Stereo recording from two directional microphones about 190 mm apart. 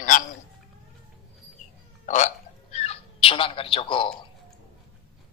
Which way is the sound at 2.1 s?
40° left (ahead or behind).